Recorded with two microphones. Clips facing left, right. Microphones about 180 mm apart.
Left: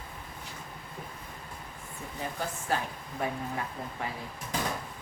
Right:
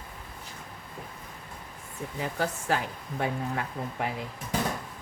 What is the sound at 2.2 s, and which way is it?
Speech, 90° right.